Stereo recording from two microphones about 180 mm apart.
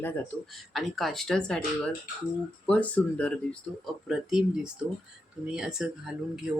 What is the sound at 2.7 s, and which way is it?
Speech, 10° left (ahead or behind).